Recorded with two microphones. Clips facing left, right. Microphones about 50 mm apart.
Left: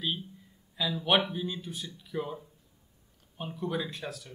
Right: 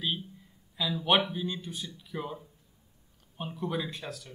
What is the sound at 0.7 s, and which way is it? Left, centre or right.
Speech, centre.